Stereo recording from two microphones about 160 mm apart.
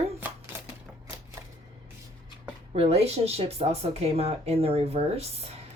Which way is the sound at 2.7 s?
40° right (ahead or behind).